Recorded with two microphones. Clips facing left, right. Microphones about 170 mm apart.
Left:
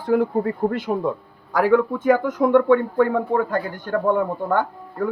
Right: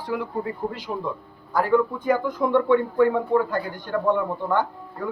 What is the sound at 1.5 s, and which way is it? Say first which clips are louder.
Speech: left 3 dB; 90° left.